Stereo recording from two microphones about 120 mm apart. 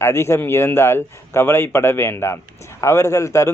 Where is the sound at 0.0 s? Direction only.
20° left (ahead or behind).